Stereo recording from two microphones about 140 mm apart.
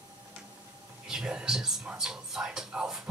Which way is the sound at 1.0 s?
5° right (ahead or behind).